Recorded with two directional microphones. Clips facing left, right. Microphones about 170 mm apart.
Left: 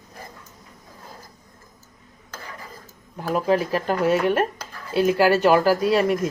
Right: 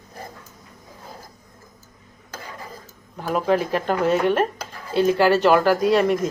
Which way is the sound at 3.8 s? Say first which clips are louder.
Right 1 dB; 5° left (ahead or behind).